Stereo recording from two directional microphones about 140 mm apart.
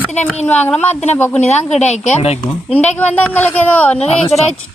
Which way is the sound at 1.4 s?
55° left (ahead or behind).